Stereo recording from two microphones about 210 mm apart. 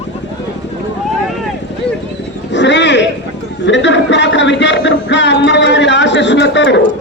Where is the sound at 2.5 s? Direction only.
55° left (ahead or behind).